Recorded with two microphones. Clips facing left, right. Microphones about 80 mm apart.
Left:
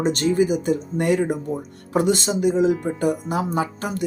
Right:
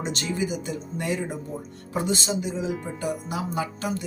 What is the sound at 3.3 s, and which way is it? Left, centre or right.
Speech, left.